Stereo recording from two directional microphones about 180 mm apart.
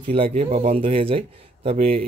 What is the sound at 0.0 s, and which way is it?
A man's voice, 30° right (ahead or behind).